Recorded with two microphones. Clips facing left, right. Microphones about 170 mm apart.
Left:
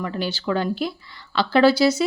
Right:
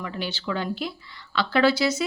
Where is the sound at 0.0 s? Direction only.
40° left (ahead or behind).